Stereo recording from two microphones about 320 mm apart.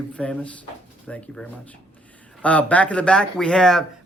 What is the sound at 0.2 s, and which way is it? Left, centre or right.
Speech, centre.